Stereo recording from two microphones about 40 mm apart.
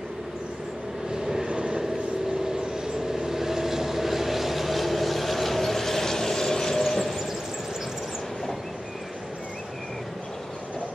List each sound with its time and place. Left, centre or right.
1.5 s vehicle: right
3.1 s vehicle: centre